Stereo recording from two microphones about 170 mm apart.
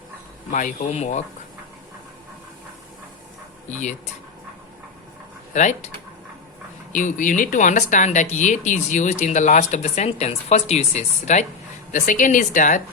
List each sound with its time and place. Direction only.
0.5 s speech: 45° left (ahead or behind)
3.7 s speech: 45° left (ahead or behind)
5.5 s speech: 45° left (ahead or behind)
6.9 s speech: 50° left (ahead or behind)